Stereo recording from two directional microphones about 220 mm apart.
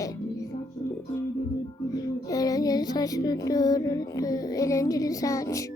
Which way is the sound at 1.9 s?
15° left (ahead or behind).